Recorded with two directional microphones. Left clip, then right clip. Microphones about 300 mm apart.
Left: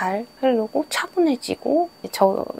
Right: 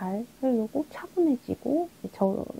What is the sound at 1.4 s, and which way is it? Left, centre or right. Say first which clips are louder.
Speech: left 8 dB; left.